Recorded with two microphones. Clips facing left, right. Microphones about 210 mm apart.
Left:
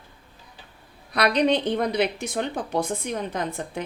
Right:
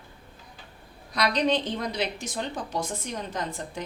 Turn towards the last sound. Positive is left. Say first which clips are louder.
# left 4 dB
turn(degrees=60)  # may be behind; listen again after turning